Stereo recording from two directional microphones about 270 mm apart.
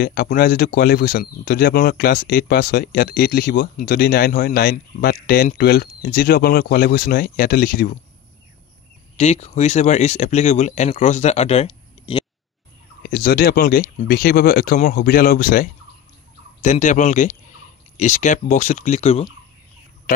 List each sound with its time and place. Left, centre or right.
0.0 s speech: left
9.1 s speech: left
13.0 s speech: left